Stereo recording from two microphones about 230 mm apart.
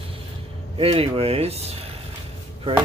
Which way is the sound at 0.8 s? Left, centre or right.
Right.